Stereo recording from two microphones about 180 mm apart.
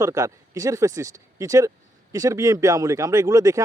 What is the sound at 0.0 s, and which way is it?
Speech, 20° right (ahead or behind).